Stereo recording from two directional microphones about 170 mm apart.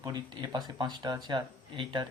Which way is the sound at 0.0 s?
25° right (ahead or behind).